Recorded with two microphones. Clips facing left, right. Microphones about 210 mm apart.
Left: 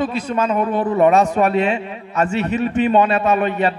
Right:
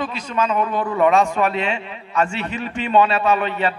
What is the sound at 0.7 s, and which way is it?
Speech, 20° left (ahead or behind).